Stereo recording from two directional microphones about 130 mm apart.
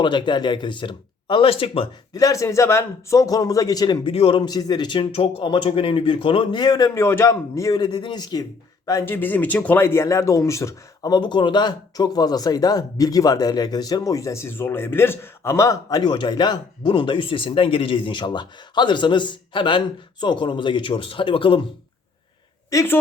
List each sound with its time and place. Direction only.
0.0 s speech: 35° left (ahead or behind)
2.1 s speech: 25° left (ahead or behind)
4.1 s speech: 45° left (ahead or behind)
8.9 s speech: 20° left (ahead or behind)
11.1 s speech: 35° left (ahead or behind)
22.7 s speech: 25° left (ahead or behind)